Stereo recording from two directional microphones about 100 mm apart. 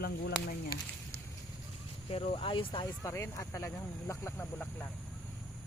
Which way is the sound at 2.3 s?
55° left (ahead or behind).